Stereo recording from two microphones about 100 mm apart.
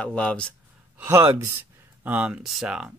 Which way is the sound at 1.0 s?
25° right (ahead or behind).